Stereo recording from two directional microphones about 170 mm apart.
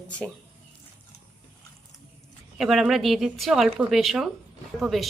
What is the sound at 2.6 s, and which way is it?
Speech, centre (ahead or behind).